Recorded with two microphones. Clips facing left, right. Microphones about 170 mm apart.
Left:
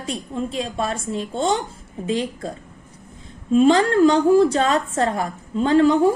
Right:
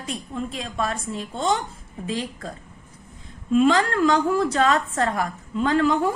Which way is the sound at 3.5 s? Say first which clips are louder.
Left 4 dB; 30° left (ahead or behind).